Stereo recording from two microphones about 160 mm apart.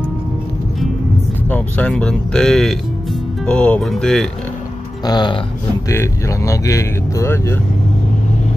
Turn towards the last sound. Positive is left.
turn(degrees=15)  # may be behind; listen again after turning